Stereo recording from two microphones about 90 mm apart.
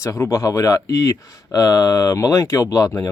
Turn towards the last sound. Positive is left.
turn(degrees=35)  # may be behind; listen again after turning